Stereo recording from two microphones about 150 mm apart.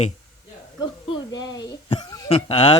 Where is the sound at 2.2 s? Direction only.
40° left (ahead or behind).